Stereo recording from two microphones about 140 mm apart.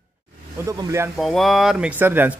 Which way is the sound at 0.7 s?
20° right (ahead or behind).